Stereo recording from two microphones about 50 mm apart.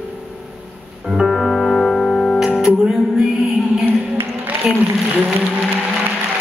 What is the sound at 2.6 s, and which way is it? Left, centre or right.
Music, centre.